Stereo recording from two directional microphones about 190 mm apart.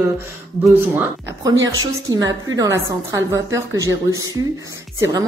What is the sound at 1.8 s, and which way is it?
A woman's voice, 20° right (ahead or behind).